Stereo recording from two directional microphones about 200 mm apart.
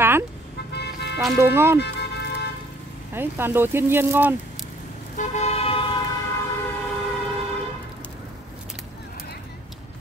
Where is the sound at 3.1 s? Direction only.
10° right (ahead or behind).